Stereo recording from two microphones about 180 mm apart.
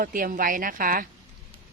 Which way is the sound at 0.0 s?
50° right (ahead or behind).